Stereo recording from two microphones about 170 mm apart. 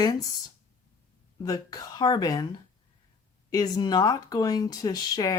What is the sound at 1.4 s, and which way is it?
Speech, 20° left (ahead or behind).